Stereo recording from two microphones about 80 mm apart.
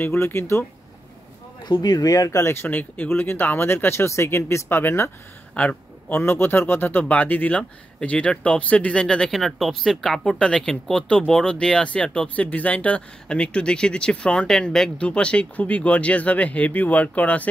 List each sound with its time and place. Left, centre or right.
0.0 s speech: left
1.6 s speech: left
2.4 s speech: left
5.5 s a man's voice: centre